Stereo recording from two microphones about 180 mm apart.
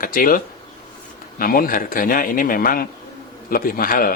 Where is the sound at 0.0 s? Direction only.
50° left (ahead or behind).